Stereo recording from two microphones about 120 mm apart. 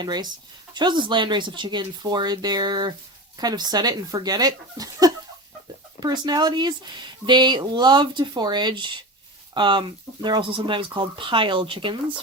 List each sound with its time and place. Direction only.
0.0 s speech: 35° right (ahead or behind)